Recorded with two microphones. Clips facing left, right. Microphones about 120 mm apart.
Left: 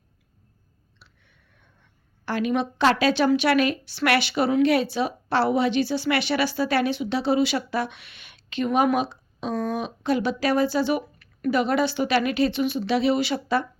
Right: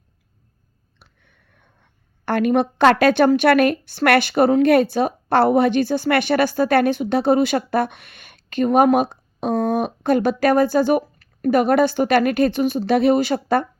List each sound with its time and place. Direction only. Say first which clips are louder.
0.9 s a woman's voice: right 2 dB; 50° right (ahead or behind)